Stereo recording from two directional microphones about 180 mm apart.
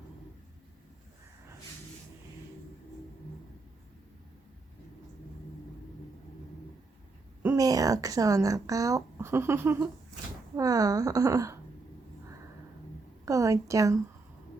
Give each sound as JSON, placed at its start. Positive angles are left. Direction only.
{"t": 7.5, "sound": "speech", "side_deg": -20}
{"t": 13.2, "sound": "a woman's voice", "side_deg": -20}